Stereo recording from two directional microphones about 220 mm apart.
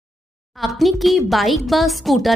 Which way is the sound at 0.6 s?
Centre (ahead or behind).